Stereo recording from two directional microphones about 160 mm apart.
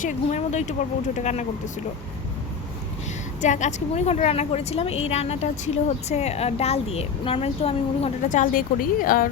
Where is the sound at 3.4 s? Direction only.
50° left (ahead or behind).